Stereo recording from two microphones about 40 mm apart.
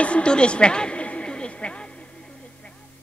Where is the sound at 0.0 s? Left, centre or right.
Left.